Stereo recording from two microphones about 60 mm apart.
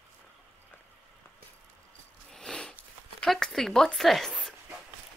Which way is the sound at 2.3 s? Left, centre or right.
Centre.